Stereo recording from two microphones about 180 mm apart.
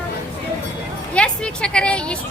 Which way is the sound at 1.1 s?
5° left (ahead or behind).